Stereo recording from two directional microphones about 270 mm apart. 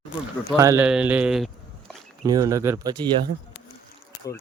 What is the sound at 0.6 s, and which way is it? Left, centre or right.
Speech, centre.